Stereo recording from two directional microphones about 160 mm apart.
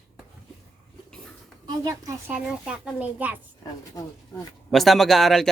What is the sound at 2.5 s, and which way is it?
Speech, 5° right (ahead or behind).